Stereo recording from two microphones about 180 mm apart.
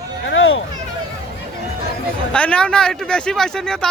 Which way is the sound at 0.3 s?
90° left.